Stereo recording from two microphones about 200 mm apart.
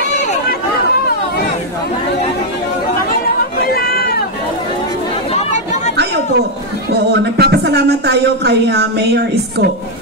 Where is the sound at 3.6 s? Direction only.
50° left (ahead or behind).